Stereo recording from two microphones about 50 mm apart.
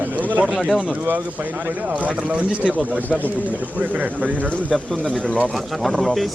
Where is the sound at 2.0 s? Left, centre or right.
Right.